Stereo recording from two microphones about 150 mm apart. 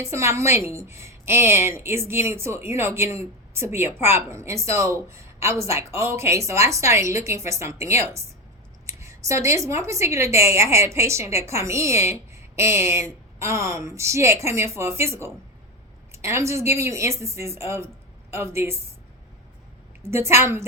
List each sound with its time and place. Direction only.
0.0 s a woman's voice: 20° right (ahead or behind)
20.0 s a woman's voice: 15° right (ahead or behind)